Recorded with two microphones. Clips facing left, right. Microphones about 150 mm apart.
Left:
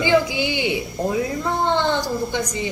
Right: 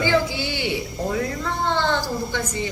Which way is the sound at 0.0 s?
15° left (ahead or behind).